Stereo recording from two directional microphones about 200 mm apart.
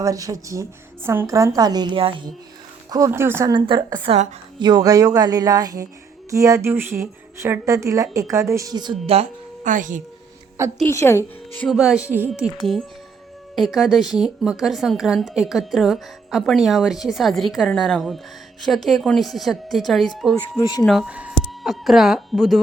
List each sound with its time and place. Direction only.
0.0 s speech: 15° right (ahead or behind)
2.9 s speech: 15° right (ahead or behind); by 4.4 s 30° right (ahead or behind)
4.6 s speech: 20° right (ahead or behind); by 10.0 s 40° right (ahead or behind)
10.8 s a woman's voice: 15° left (ahead or behind)
20.6 s speech: 20° left (ahead or behind)
20.8 s speech: centre (ahead or behind)